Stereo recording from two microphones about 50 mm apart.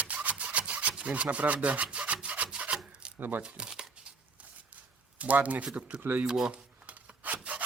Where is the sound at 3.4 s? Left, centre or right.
Centre.